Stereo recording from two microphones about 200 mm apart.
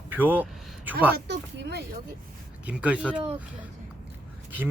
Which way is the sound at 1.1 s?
55° right (ahead or behind).